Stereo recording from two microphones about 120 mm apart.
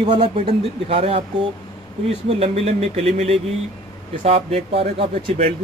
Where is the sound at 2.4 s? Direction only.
60° right (ahead or behind).